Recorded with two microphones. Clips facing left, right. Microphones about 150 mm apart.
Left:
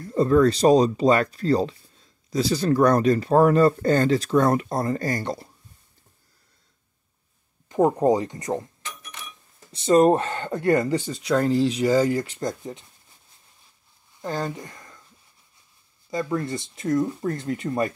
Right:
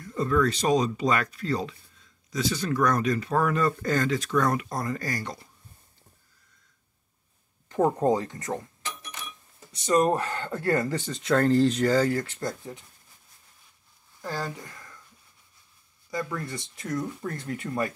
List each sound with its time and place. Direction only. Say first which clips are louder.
0.0 s speech: left 7 dB; 35° left (ahead or behind)
7.6 s speech: left 4 dB; 15° left (ahead or behind)
9.7 s speech: left 6 dB; 30° left (ahead or behind)
14.2 s speech: left 5 dB; 20° left (ahead or behind)
16.1 s speech: left 6 dB; 25° left (ahead or behind)